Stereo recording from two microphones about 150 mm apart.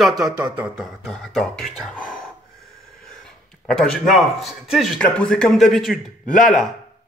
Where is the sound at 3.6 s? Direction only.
Centre (ahead or behind).